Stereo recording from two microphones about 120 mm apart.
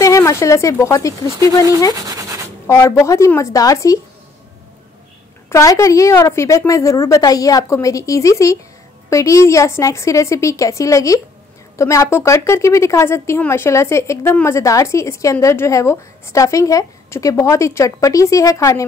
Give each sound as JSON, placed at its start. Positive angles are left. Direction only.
{"t": 0.0, "sound": "speech", "side_deg": 25}
{"t": 2.0, "sound": "a sound", "side_deg": -30}
{"t": 2.7, "sound": "a woman's voice", "side_deg": 25}
{"t": 5.5, "sound": "a woman's voice", "side_deg": 25}